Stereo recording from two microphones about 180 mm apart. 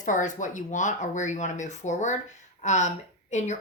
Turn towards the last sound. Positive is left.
turn(degrees=40)  # may be behind; listen again after turning